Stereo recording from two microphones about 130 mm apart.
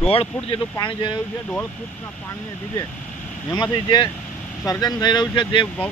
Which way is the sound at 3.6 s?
35° left (ahead or behind).